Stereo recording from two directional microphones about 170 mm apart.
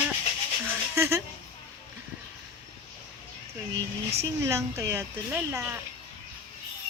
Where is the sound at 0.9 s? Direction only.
15° right (ahead or behind).